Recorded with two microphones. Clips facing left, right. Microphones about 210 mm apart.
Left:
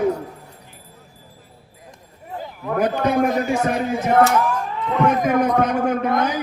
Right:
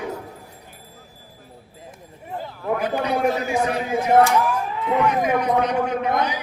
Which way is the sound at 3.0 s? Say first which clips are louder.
Left 4 dB; 45° left (ahead or behind).